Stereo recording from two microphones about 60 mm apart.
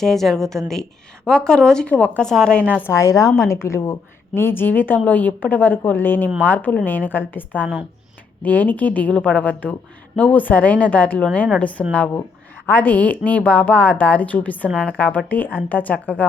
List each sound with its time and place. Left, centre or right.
0.0 s speech: centre
1.9 s a woman's voice: left
2.9 s a woman's voice: left